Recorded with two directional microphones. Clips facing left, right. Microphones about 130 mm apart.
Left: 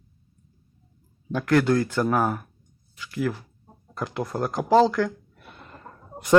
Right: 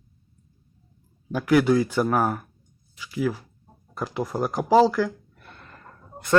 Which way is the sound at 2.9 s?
5° right (ahead or behind).